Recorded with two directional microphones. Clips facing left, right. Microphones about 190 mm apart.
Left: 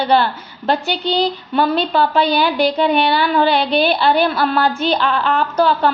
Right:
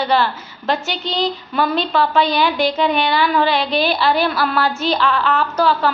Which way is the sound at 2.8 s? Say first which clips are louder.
Left 2 dB; 35° left (ahead or behind).